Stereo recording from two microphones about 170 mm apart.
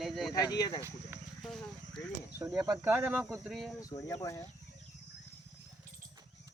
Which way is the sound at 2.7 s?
10° right (ahead or behind).